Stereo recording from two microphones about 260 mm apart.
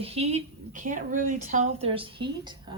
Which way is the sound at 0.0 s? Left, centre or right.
Right.